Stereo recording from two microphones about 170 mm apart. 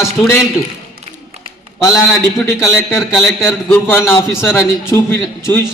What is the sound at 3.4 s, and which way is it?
A man's voice, 15° left (ahead or behind).